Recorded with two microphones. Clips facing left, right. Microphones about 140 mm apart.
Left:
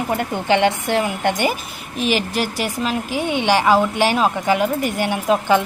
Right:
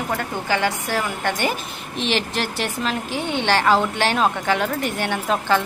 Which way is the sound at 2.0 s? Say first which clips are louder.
Left 3 dB; 10° left (ahead or behind).